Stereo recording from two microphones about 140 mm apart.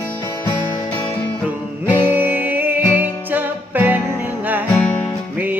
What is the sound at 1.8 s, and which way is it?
Music, 15° right (ahead or behind).